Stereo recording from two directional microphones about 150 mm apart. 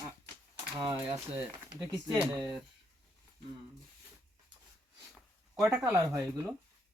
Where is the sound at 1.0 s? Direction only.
40° right (ahead or behind).